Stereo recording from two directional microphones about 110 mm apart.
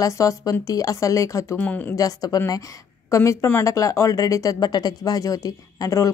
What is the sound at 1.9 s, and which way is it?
Speech, 35° left (ahead or behind).